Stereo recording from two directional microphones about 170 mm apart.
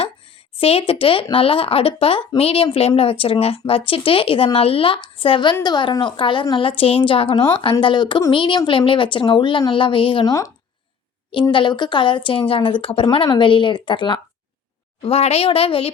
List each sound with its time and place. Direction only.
0.5 s a woman's voice: 35° left (ahead or behind)
11.4 s a woman's voice: 25° left (ahead or behind)